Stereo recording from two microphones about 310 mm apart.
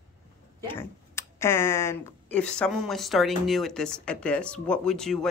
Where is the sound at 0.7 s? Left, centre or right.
Centre.